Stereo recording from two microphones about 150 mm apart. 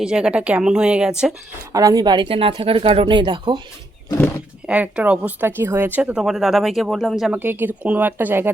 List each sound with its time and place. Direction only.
0.0 s speech: 5° right (ahead or behind)
1.7 s speech: 25° right (ahead or behind)
4.6 s speech: 10° right (ahead or behind)
7.3 s speech: 15° right (ahead or behind)